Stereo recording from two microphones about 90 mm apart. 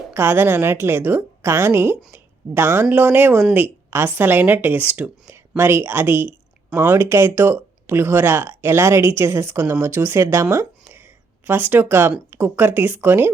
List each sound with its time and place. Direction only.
0.1 s a woman's voice: 25° right (ahead or behind)
11.4 s speech: 20° right (ahead or behind)